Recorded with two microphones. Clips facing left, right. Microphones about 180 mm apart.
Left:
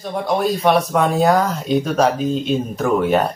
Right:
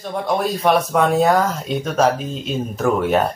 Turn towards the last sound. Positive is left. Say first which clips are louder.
# left 1 dB
turn(degrees=0)  # may be behind; listen again after turning